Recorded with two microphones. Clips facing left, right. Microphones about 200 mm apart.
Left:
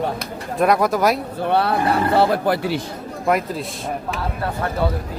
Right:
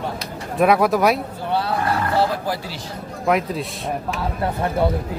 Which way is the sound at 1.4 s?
60° left (ahead or behind).